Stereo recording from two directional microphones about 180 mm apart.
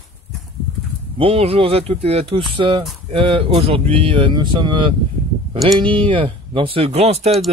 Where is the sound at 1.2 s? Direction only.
30° right (ahead or behind).